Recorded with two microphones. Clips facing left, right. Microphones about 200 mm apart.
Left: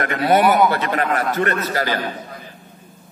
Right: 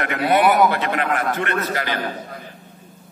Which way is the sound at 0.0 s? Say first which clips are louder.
Left 1 dB; 40° left (ahead or behind).